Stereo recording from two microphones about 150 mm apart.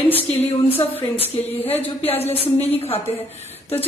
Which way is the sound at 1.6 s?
10° left (ahead or behind).